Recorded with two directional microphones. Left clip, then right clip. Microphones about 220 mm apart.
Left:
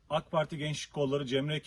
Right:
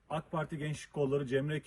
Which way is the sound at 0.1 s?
15° left (ahead or behind).